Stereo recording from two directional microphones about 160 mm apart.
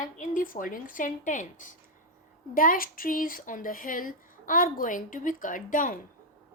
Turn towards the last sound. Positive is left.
turn(degrees=55)  # may be behind; listen again after turning